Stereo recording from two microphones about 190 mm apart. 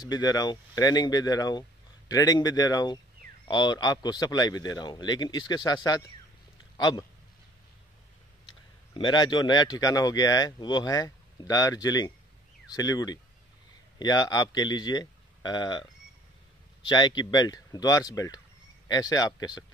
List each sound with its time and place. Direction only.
0.0 s speech: 20° left (ahead or behind)
8.5 s a man's voice: 25° left (ahead or behind)
16.8 s speech: 25° left (ahead or behind)